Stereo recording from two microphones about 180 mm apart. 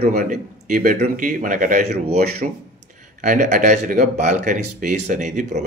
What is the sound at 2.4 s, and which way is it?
Speech, 45° right (ahead or behind).